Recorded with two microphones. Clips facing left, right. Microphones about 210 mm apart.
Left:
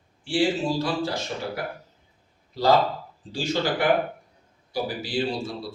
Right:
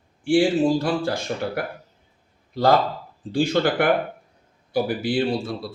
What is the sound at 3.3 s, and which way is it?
A man's voice, 55° right (ahead or behind).